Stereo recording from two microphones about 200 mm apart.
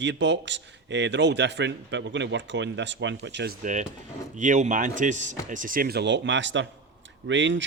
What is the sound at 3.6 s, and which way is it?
Speech, 40° right (ahead or behind).